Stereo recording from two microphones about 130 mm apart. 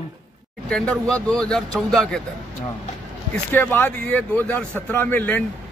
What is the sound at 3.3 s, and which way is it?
Speech, 15° left (ahead or behind).